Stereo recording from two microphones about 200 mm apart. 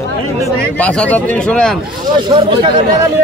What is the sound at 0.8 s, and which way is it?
Speech, 5° left (ahead or behind).